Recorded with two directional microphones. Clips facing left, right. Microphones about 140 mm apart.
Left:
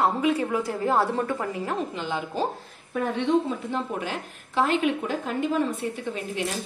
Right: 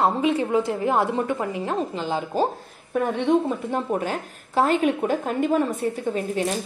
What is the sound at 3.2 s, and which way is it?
Speech, 45° right (ahead or behind).